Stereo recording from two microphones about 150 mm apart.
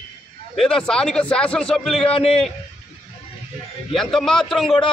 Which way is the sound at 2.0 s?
40° left (ahead or behind).